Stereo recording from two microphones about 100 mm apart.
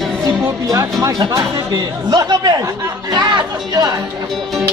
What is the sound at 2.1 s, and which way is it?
Speech, 40° right (ahead or behind).